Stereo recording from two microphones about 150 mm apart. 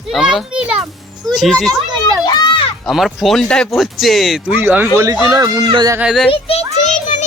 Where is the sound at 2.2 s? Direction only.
30° left (ahead or behind).